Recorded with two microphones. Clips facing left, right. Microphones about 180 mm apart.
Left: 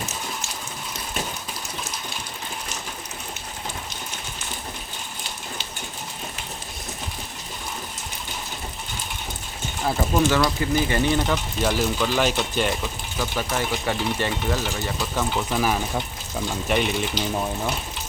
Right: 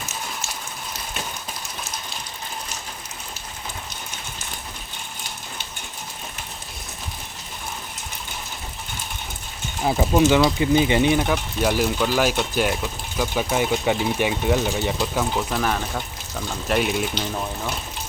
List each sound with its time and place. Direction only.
9.8 s speech: 15° right (ahead or behind)
15.2 s speech: centre (ahead or behind)
16.6 s speech: centre (ahead or behind)